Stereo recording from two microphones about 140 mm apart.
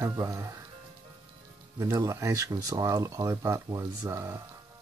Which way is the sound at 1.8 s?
20° right (ahead or behind).